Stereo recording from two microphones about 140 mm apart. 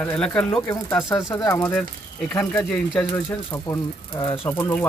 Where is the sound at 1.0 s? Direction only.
25° left (ahead or behind).